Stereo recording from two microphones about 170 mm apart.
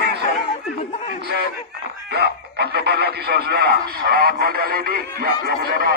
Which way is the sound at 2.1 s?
75° right (ahead or behind).